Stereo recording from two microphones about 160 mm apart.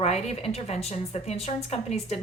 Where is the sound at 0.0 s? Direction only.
40° left (ahead or behind).